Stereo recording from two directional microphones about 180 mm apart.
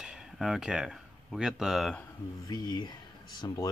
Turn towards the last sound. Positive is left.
turn(degrees=20)  # may be behind; listen again after turning